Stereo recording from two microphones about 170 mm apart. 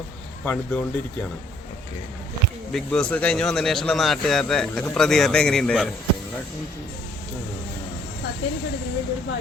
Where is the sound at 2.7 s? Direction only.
5° left (ahead or behind).